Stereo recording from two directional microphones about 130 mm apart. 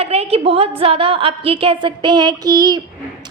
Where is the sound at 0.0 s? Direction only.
50° right (ahead or behind); by 2.8 s 30° right (ahead or behind).